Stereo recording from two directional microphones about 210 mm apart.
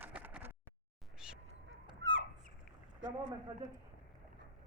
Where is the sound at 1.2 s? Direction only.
5° right (ahead or behind).